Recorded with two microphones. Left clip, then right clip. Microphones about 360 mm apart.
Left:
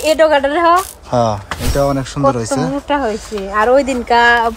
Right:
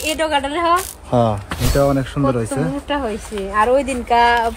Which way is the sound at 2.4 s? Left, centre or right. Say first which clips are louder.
Left 5 dB; left.